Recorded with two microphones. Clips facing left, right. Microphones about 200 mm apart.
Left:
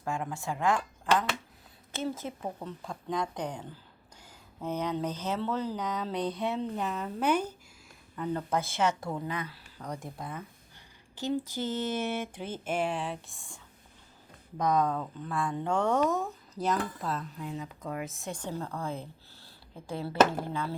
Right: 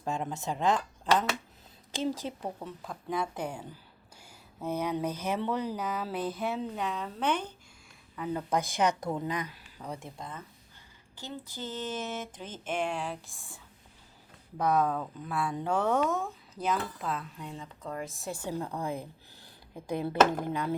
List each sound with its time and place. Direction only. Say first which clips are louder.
0.0 s speech: right 1 dB; 20° right (ahead or behind)
2.2 s speech: right 1 dB; 20° right (ahead or behind)
2.6 s speech: left 1 dB; 5° right (ahead or behind)
8.1 s speech: even; 5° right (ahead or behind)
10.2 s speech: left 3 dB; 10° left (ahead or behind)
11.1 s a sound: left 11 dB; 15° left (ahead or behind)
11.4 s speech: left 5 dB; 15° left (ahead or behind); by 13.6 s centre (ahead or behind)
14.6 s speech: even; 5° right (ahead or behind)